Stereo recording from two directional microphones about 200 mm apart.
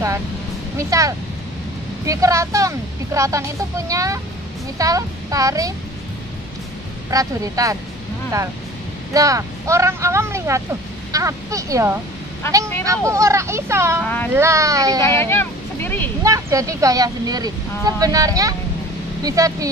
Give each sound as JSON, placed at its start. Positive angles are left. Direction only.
{"t": 0.7, "sound": "speech", "side_deg": -15}
{"t": 7.1, "sound": "speech", "side_deg": -15}
{"t": 9.1, "sound": "speech", "side_deg": -15}
{"t": 14.0, "sound": "speech", "side_deg": 10}
{"t": 14.3, "sound": "speech", "side_deg": -15}
{"t": 15.0, "sound": "vehicle", "side_deg": 10}
{"t": 16.2, "sound": "speech", "side_deg": -15}